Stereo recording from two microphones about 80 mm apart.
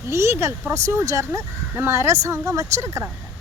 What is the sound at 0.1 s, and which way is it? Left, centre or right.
Speech, right.